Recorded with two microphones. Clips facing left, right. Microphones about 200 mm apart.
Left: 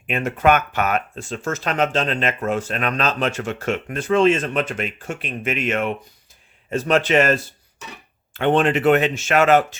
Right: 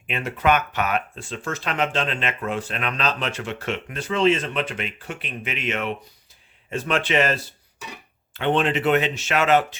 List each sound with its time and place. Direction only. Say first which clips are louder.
0.1 s a man's voice: left 4 dB; 45° left (ahead or behind)